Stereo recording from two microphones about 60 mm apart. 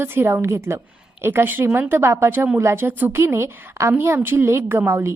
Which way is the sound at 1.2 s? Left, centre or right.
Right.